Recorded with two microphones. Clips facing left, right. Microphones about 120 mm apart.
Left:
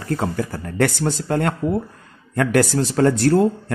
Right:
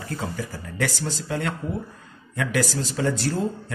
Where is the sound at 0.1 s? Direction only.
55° left (ahead or behind).